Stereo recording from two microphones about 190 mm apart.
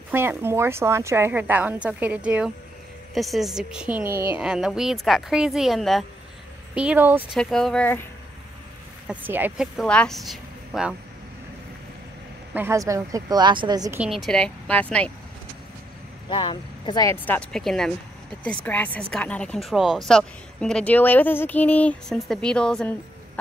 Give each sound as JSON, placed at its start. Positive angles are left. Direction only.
{"t": 0.1, "sound": "a woman's voice", "side_deg": -10}
{"t": 7.3, "sound": "a woman's voice", "side_deg": 0}
{"t": 9.0, "sound": "a woman's voice", "side_deg": -10}
{"t": 12.5, "sound": "a woman's voice", "side_deg": -15}
{"t": 13.9, "sound": "a woman's voice", "side_deg": -5}
{"t": 16.3, "sound": "a woman's voice", "side_deg": 25}